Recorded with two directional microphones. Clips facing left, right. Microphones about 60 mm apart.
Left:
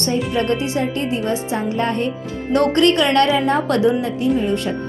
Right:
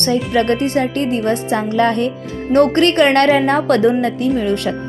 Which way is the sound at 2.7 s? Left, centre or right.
Right.